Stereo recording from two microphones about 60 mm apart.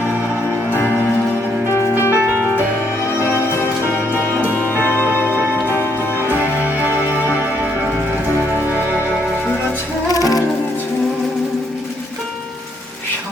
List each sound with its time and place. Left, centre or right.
1.7 s music: left
2.3 s music: right
4.8 s music: left
5.2 s music: right
5.6 s music: left
6.1 s music: right
10.1 s music: left